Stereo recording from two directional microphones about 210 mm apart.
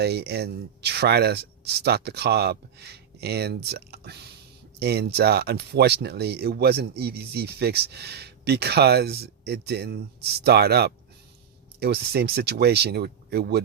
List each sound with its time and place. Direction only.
0.0 s speech: 50° right (ahead or behind)